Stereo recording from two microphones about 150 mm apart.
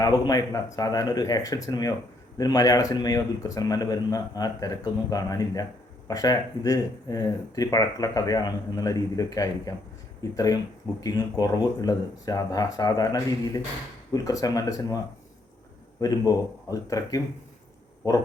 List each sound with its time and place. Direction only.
0.0 s speech: 25° left (ahead or behind)
16.0 s speech: 25° left (ahead or behind)